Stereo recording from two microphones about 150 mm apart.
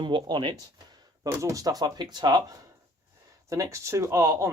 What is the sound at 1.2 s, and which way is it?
Speech, 20° right (ahead or behind).